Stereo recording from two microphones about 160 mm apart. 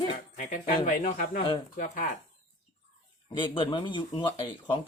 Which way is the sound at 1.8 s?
55° left (ahead or behind).